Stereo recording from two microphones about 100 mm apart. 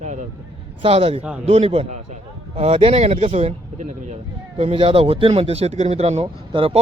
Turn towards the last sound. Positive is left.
turn(degrees=-70)  # may be behind; listen again after turning